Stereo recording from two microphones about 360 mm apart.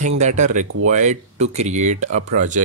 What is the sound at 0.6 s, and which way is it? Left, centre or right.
Speech, right.